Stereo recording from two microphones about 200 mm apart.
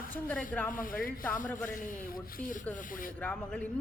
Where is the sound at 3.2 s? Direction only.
5° left (ahead or behind).